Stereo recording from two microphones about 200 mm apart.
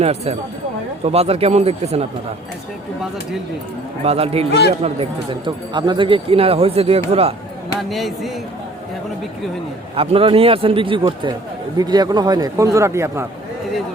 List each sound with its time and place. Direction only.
0.0 s speech: 30° right (ahead or behind)
4.0 s speech: 30° right (ahead or behind)
7.8 s speech: centre (ahead or behind)
9.9 s a man's voice: 30° right (ahead or behind)